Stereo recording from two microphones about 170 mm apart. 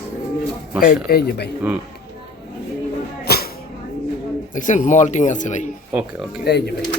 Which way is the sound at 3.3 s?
70° left (ahead or behind).